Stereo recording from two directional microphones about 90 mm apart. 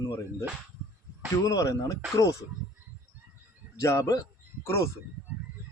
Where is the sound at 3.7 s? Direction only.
35° left (ahead or behind).